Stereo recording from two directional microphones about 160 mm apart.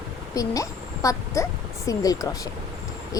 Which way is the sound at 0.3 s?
20° left (ahead or behind).